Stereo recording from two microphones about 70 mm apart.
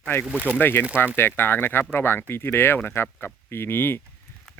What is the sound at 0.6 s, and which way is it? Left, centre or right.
Speech, left.